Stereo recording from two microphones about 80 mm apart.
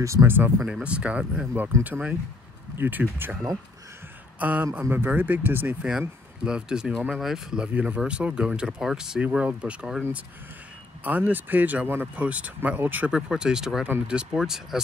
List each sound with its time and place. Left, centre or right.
0.0 s speech: right
0.6 s speech: centre
0.8 s speech: centre
5.9 s speech: centre
11.1 s speech: right
13.1 s speech: centre